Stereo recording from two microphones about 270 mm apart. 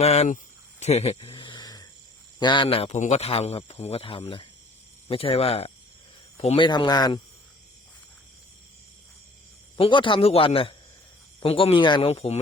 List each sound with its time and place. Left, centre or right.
0.0 s speech: left
0.8 s a sound: left
2.4 s speech: centre
9.7 s speech: centre